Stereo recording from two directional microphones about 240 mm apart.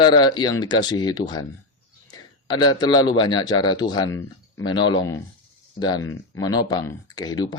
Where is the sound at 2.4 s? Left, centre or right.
Centre.